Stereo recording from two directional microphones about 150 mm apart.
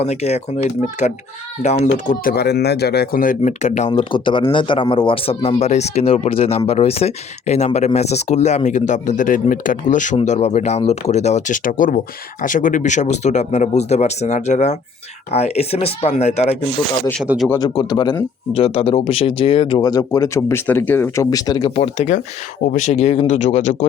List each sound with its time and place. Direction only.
0.0 s speech: 45° left (ahead or behind)
2.2 s speech: 90° left; by 4.0 s 50° left (ahead or behind)
4.1 s a man's voice: 35° left (ahead or behind)
17.5 s a man's voice: 25° left (ahead or behind)
18.5 s speech: 40° left (ahead or behind); by 21.2 s 15° left (ahead or behind)
21.2 s a man's voice: 25° left (ahead or behind)
21.8 s speech: 45° left (ahead or behind)
22.6 s speech: 60° left (ahead or behind)